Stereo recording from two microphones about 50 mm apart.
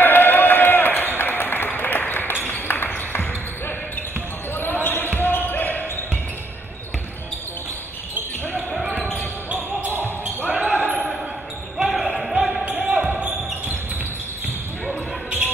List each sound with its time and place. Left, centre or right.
0.0 s a sound: left
4.6 s basketball bounce: left
5.2 s a sound: left
10.5 s basketball bounce: right
11.8 s basketball bounce: centre
12.6 s basketball bounce: right
14.9 s basketball bounce: right